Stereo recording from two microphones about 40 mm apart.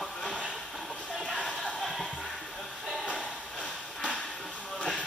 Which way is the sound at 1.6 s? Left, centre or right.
Centre.